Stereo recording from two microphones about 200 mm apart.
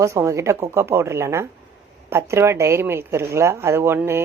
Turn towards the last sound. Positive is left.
turn(degrees=-10)  # may be behind; listen again after turning